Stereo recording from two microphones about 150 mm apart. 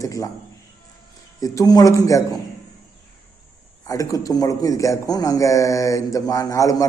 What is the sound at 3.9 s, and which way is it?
A man's voice, 25° left (ahead or behind).